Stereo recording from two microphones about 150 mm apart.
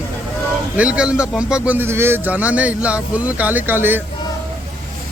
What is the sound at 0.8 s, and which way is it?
A man's voice, 10° right (ahead or behind).